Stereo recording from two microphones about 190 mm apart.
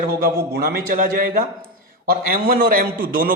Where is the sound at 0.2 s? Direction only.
55° right (ahead or behind).